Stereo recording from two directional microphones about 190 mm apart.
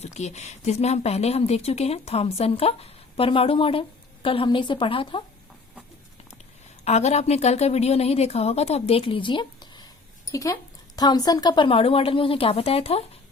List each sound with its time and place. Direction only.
0.0 s speech: 35° left (ahead or behind)
6.8 s a woman's voice: 35° left (ahead or behind)